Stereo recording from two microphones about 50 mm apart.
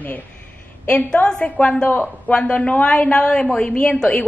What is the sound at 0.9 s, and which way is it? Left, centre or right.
A woman's voice, left.